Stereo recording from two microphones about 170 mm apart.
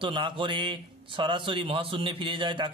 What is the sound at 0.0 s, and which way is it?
A man's voice, 30° right (ahead or behind).